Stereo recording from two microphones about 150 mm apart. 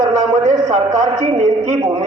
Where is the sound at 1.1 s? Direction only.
40° right (ahead or behind).